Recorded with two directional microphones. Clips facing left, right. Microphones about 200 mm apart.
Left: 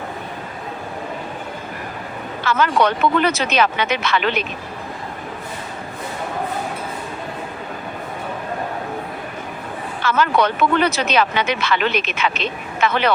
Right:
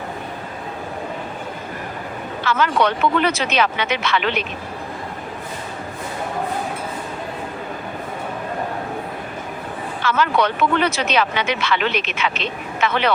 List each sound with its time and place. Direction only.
2.5 s speech: 45° left (ahead or behind)
10.1 s speech: 45° left (ahead or behind)